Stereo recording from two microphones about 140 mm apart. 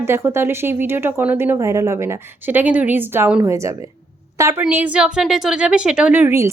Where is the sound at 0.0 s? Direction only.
20° right (ahead or behind).